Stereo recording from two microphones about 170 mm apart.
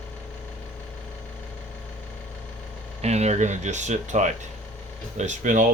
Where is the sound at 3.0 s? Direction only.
40° right (ahead or behind).